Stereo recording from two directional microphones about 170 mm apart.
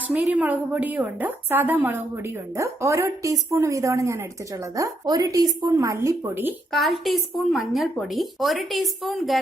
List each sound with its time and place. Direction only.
0.1 s a woman's voice: 10° right (ahead or behind)
6.7 s speech: centre (ahead or behind)